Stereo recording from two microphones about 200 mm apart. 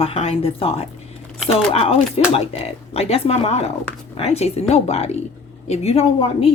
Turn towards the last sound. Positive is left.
turn(degrees=30)  # may be behind; listen again after turning